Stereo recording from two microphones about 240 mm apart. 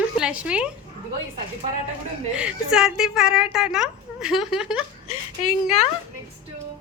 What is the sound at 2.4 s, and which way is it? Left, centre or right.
Speech, centre.